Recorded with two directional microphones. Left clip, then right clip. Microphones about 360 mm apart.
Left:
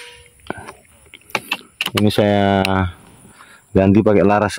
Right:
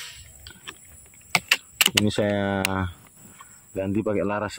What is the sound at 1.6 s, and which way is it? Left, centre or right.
Speech, left.